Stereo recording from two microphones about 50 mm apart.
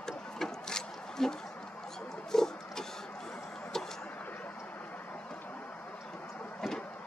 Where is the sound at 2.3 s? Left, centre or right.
Centre.